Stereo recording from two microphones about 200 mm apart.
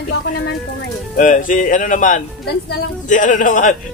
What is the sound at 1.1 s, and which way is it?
Speech, 40° left (ahead or behind).